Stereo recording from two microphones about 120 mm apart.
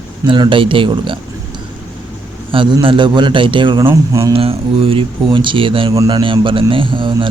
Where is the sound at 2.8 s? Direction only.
40° right (ahead or behind).